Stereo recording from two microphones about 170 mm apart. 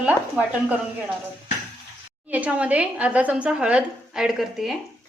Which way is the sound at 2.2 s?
10° right (ahead or behind).